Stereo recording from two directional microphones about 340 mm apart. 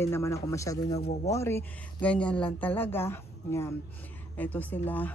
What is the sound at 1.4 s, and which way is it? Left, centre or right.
A woman's voice, centre.